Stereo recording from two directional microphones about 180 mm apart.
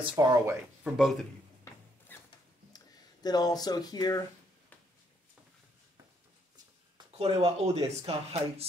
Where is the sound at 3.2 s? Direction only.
20° left (ahead or behind).